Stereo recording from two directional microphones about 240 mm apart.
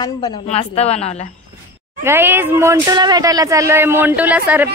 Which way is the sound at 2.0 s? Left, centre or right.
Centre.